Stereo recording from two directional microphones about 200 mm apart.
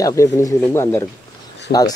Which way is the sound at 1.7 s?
50° left (ahead or behind).